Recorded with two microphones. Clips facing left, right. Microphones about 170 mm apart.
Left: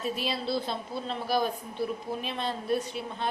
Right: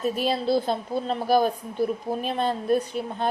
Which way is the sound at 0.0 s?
50° right (ahead or behind).